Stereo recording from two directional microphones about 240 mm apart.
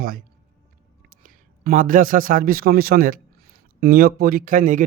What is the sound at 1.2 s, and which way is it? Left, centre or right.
A man's voice, right.